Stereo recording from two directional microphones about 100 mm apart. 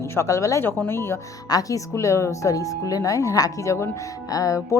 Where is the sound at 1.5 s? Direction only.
35° left (ahead or behind).